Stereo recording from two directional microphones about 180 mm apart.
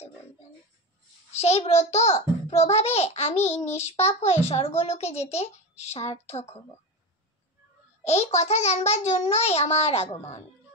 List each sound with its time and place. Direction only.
1.3 s a child's voice: 35° left (ahead or behind)
3.4 s child singing: 15° left (ahead or behind)
3.7 s a child's voice: 35° left (ahead or behind)
8.0 s a child's voice: 35° left (ahead or behind)